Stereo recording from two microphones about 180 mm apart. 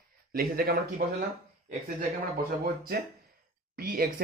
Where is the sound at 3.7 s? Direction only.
55° right (ahead or behind).